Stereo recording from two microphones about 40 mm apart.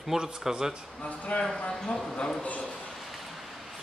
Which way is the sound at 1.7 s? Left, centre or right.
Centre.